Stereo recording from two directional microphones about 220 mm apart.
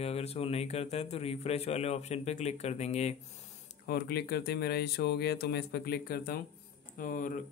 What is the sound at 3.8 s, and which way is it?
Speech, 45° left (ahead or behind).